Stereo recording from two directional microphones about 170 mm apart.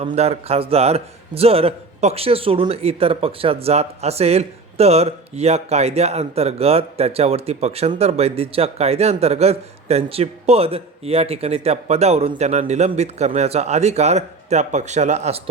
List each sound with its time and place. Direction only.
0.0 s a man's voice: 35° right (ahead or behind)